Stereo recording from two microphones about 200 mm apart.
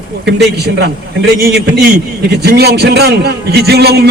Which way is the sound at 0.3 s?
55° right (ahead or behind).